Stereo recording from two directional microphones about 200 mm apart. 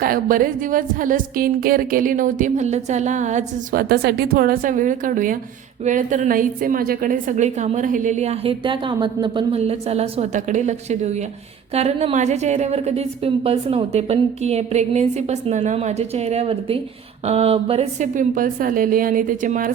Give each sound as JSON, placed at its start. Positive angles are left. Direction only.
{"t": 0.0, "sound": "a woman's voice", "side_deg": -45}